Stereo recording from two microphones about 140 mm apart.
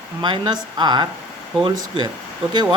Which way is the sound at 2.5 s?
30° right (ahead or behind).